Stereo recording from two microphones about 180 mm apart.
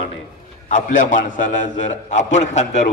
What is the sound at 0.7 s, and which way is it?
A man's voice, 45° left (ahead or behind).